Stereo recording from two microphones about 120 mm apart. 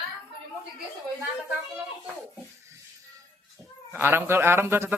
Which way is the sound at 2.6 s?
25° right (ahead or behind).